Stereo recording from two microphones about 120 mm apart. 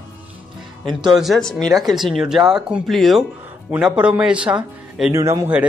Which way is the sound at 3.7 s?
10° right (ahead or behind).